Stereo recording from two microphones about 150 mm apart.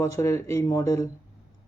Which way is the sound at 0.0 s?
20° left (ahead or behind).